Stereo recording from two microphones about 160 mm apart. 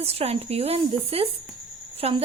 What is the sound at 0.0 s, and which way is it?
A woman's voice, 40° right (ahead or behind).